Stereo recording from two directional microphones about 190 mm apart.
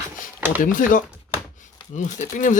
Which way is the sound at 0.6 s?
45° left (ahead or behind).